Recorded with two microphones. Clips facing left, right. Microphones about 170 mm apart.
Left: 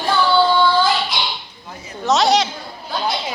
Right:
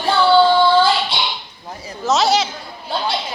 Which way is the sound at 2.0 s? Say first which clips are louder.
Left 1 dB; centre (ahead or behind).